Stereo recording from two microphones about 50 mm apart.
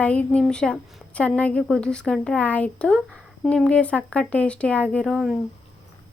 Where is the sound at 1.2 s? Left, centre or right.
Left.